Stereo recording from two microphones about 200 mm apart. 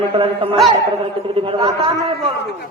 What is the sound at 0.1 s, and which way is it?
Speech, 25° right (ahead or behind).